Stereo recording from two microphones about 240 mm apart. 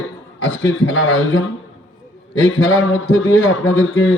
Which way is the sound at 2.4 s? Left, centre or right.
Left.